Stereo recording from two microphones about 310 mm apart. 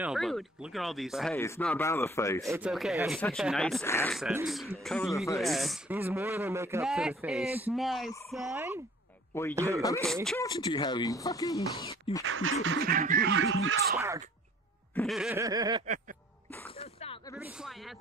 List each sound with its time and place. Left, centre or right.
0.0 s speech: centre
2.4 s speech: centre
9.3 s speech: centre
9.6 s snicker: centre
9.8 s speech: centre
12.3 s a sound: right
12.6 s speech: right
13.9 s snicker: centre
16.7 s a sound: centre
17.4 s speech: centre